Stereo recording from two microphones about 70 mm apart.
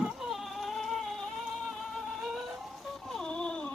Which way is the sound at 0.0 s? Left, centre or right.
Centre.